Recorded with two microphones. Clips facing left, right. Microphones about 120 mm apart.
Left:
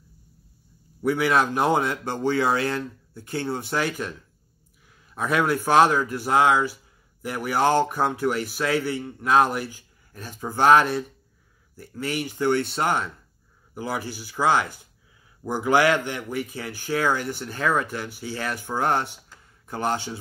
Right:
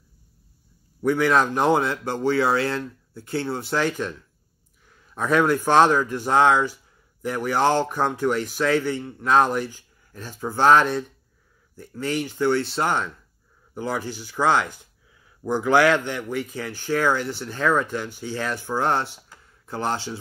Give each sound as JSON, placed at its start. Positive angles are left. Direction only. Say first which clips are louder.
{"t": 1.0, "sound": "speech", "louder": "right 2 dB", "side_deg": 10}
{"t": 5.3, "sound": "speech", "louder": "right 2 dB", "side_deg": 15}